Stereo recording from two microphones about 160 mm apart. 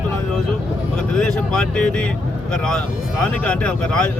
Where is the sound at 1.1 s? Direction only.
5° left (ahead or behind).